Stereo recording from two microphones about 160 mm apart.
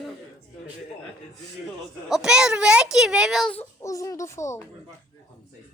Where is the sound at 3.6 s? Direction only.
20° left (ahead or behind).